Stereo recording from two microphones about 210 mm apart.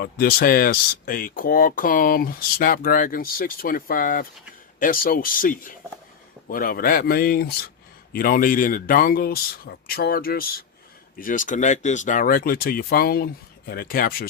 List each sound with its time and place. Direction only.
0.0 s speech: 45° left (ahead or behind)